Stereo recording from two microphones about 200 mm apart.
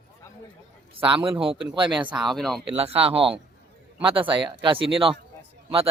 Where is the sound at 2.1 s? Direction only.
Centre (ahead or behind).